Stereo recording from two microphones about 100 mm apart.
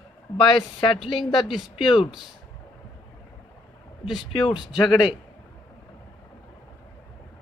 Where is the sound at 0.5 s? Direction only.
60° left (ahead or behind).